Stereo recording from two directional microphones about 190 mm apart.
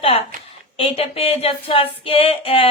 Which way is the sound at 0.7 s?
30° left (ahead or behind).